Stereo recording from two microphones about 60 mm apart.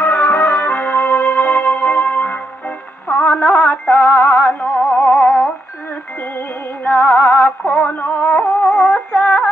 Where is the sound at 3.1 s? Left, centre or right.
Left.